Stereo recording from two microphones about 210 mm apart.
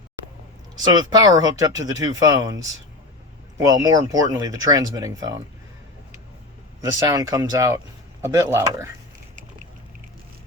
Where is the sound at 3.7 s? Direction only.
15° right (ahead or behind).